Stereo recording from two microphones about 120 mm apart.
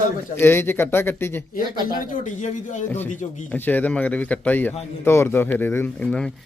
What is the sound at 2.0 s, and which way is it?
Speech, 90° left.